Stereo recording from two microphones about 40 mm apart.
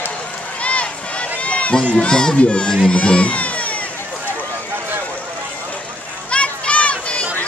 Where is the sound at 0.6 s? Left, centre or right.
Left.